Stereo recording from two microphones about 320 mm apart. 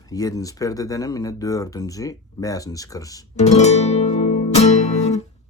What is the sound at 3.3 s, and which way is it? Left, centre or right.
Music, left.